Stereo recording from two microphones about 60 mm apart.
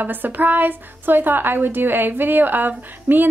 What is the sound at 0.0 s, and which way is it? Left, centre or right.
A woman's voice, right.